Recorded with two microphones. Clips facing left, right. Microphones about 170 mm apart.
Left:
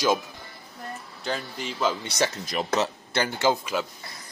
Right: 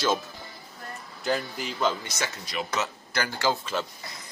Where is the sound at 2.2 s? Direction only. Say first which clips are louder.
Left 6 dB; 40° left (ahead or behind); by 3.7 s 20° left (ahead or behind).